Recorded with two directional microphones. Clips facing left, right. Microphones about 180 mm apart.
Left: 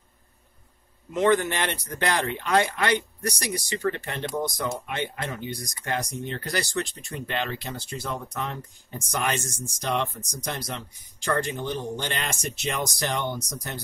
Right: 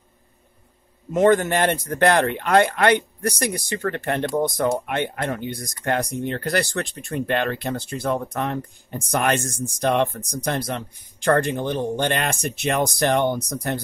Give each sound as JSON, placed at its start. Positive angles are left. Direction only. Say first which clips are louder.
{"t": 1.1, "sound": "speech", "louder": "right 5 dB", "side_deg": -45}